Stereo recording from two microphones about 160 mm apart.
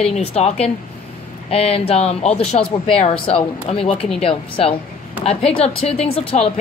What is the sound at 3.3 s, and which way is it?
Speech, 40° left (ahead or behind).